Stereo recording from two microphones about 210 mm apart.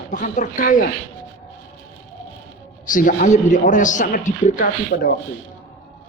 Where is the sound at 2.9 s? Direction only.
40° left (ahead or behind).